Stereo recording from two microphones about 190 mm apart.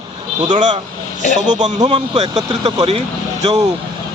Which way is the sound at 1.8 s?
25° right (ahead or behind).